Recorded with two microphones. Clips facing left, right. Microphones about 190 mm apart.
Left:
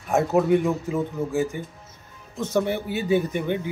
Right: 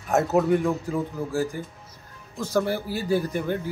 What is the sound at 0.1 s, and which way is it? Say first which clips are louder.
Speech: left 1 dB; centre (ahead or behind).